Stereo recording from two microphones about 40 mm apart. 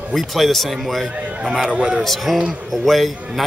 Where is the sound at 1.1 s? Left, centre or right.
Right.